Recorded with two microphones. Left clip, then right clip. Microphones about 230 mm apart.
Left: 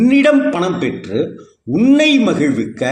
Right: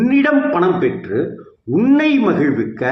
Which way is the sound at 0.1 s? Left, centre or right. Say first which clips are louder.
Left 1 dB; left.